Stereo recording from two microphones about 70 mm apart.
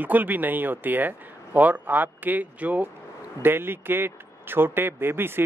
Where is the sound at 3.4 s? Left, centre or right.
Right.